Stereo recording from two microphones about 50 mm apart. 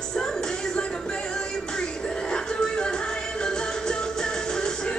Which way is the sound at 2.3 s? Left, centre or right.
Centre.